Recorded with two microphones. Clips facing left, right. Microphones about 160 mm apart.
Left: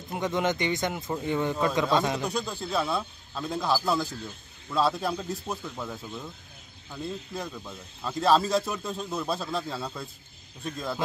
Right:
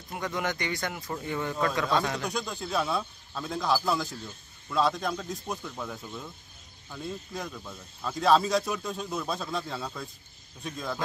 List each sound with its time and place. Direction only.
0.1 s speech: 20° left (ahead or behind)
2.2 s speech: 5° left (ahead or behind)